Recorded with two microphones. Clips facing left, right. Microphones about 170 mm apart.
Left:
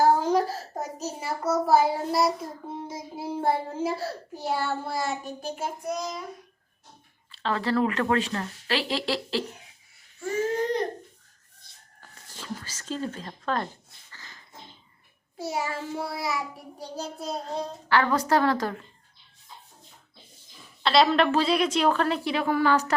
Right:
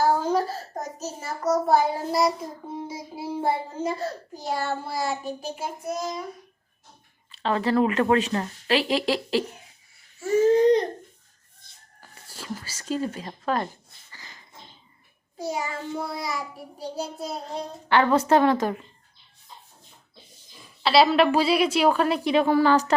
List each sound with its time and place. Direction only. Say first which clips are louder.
0.0 s a child's voice: left 1 dB; 15° left (ahead or behind); by 6.1 s 5° right (ahead or behind)
7.3 s a child's voice: right 3 dB; 15° right (ahead or behind)
11.9 s speech: right 2 dB; 10° right (ahead or behind)
14.1 s a sound: right 2 dB; 15° right (ahead or behind)
15.4 s a child's voice: right 1 dB; 5° left (ahead or behind)
17.0 s speech: even; 10° right (ahead or behind)
17.8 s a woman's voice: right 4 dB; 20° right (ahead or behind)
20.8 s speech: right 2 dB; 5° right (ahead or behind); by 22.9 s 30° right (ahead or behind)